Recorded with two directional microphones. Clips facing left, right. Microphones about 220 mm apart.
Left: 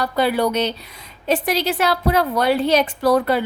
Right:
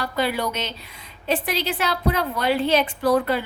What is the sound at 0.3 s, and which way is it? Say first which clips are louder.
A woman's voice: left 8 dB; 35° left (ahead or behind).